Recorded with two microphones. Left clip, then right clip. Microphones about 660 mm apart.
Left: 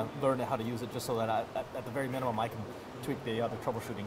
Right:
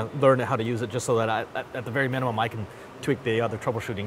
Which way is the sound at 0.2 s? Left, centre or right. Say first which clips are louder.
Right 11 dB; right.